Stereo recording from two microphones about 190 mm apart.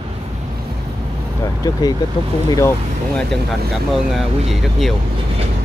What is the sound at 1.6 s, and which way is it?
Speech, 20° left (ahead or behind).